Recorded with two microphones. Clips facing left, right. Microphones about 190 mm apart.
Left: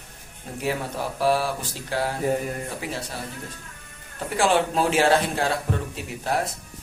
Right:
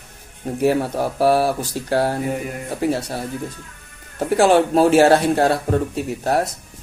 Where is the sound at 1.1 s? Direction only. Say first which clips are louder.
Right 6 dB; 40° right (ahead or behind).